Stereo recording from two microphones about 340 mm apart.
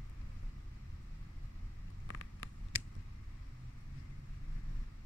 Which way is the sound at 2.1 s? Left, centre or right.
Left.